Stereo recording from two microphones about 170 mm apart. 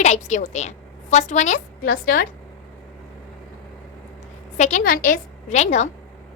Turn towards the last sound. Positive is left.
turn(degrees=40)  # may be behind; listen again after turning